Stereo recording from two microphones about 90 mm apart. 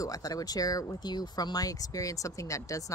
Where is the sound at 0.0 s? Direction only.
40° left (ahead or behind).